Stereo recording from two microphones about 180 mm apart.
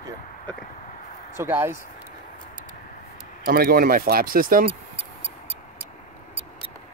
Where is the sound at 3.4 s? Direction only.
55° right (ahead or behind).